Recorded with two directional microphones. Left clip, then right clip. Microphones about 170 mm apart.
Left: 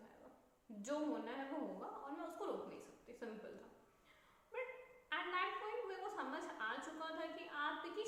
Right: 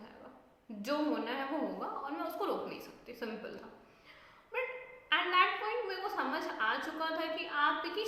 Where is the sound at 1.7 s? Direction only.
25° right (ahead or behind).